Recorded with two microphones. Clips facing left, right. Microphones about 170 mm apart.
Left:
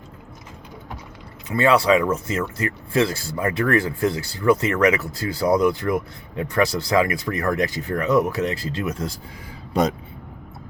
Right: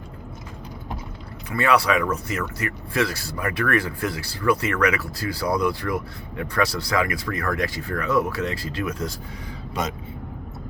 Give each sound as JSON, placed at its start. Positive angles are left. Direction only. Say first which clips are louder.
{"t": 1.5, "sound": "speech", "louder": "left 4 dB", "side_deg": 25}